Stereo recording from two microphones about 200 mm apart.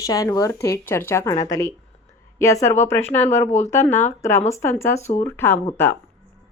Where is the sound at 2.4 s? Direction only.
15° left (ahead or behind).